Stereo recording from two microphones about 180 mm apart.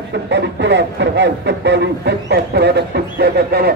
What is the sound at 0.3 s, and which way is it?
Speech, 75° right (ahead or behind).